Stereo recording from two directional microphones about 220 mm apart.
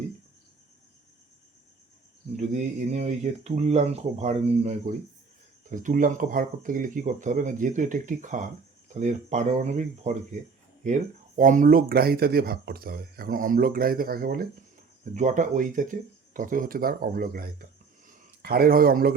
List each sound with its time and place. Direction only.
2.3 s speech: 30° right (ahead or behind)